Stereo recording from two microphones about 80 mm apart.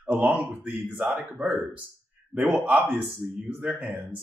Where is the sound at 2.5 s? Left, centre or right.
Right.